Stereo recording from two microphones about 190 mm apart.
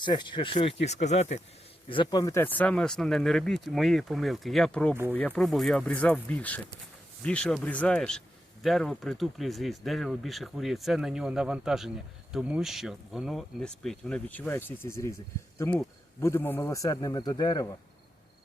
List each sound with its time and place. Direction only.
0.0 s a man's voice: 25° left (ahead or behind)
1.9 s a man's voice: 25° left (ahead or behind)